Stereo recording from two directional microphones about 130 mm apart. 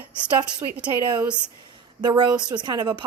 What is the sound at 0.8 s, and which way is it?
Speech, 10° right (ahead or behind).